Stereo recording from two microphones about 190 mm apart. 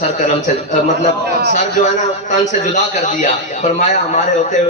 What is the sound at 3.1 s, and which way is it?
A man's voice, 40° left (ahead or behind).